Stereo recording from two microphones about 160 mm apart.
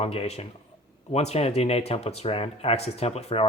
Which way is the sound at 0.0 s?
40° left (ahead or behind).